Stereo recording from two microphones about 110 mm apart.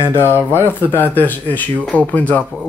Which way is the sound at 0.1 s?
20° left (ahead or behind).